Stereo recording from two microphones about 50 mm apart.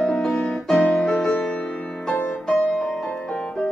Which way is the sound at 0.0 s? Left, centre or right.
Centre.